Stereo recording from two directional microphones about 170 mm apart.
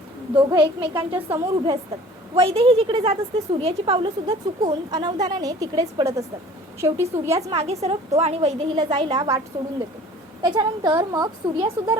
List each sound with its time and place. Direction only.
0.3 s a woman's voice: 25° right (ahead or behind)
0.9 s a woman's voice: 15° right (ahead or behind)
2.3 s a woman's voice: 35° right (ahead or behind); by 7.4 s 15° right (ahead or behind)
7.4 s a woman's voice: 40° right (ahead or behind)
8.9 s a woman's voice: 25° right (ahead or behind)
10.4 s a woman's voice: 25° right (ahead or behind)